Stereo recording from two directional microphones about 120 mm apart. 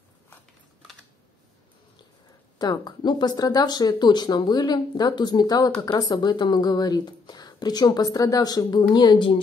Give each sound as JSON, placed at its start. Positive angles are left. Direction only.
{"t": 2.6, "sound": "speech", "side_deg": 35}